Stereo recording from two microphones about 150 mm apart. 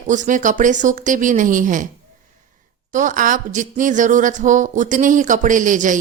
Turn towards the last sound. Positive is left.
turn(degrees=-60)  # may be behind; listen again after turning